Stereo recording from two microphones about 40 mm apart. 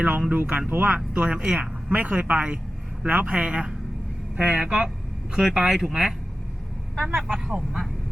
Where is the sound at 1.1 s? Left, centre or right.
Right.